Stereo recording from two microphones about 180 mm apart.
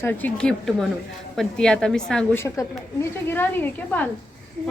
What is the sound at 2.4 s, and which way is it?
A woman's voice, 15° left (ahead or behind).